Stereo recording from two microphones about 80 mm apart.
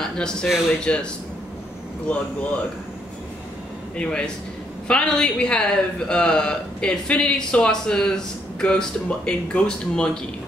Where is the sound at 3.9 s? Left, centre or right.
Centre.